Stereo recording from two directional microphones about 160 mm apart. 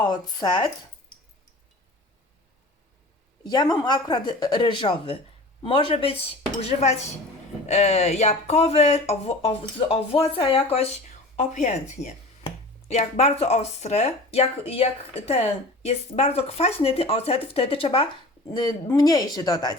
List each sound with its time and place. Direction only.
0.0 s speech: 30° left (ahead or behind)
3.4 s speech: 25° left (ahead or behind)
11.3 s speech: 50° left (ahead or behind)
18.5 s speech: 25° left (ahead or behind)